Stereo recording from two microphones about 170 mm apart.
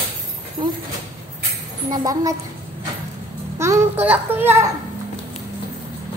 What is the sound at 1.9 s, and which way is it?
Speech, 20° right (ahead or behind).